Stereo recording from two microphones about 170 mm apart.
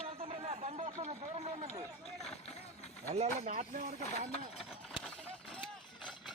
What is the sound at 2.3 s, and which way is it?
Vehicle, 40° left (ahead or behind).